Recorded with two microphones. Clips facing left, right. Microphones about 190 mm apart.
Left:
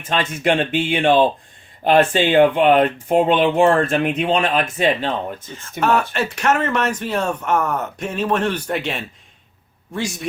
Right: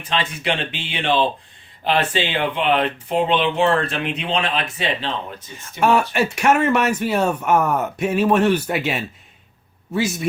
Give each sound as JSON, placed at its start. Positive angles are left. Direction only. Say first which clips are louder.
{"t": 0.0, "sound": "speech", "louder": "left 4 dB", "side_deg": 50}
{"t": 6.1, "sound": "speech", "louder": "right 2 dB", "side_deg": -10}